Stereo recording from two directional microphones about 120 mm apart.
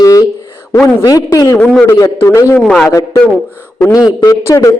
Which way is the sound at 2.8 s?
25° left (ahead or behind).